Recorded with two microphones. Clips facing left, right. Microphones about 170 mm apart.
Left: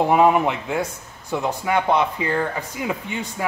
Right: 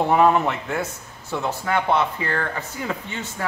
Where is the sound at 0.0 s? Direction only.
15° left (ahead or behind).